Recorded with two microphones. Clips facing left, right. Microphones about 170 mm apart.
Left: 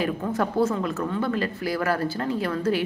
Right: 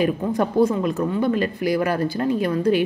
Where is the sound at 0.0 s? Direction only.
15° right (ahead or behind).